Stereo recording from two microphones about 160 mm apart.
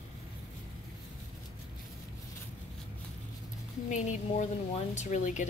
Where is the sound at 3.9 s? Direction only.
50° left (ahead or behind).